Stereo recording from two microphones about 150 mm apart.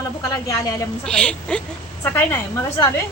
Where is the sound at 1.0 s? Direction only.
5° left (ahead or behind).